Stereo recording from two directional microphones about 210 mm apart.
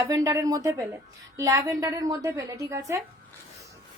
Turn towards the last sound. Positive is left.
turn(degrees=-15)  # may be behind; listen again after turning